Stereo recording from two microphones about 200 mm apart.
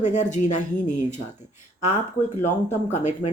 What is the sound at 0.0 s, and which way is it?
Speech, 35° left (ahead or behind).